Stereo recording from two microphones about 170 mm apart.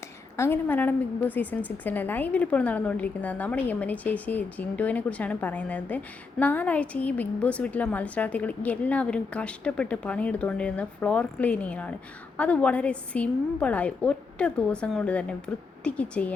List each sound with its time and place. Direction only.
0.3 s a woman's voice: 15° left (ahead or behind)